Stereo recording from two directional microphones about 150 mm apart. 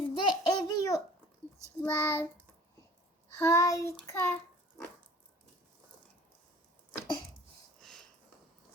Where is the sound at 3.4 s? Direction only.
20° left (ahead or behind).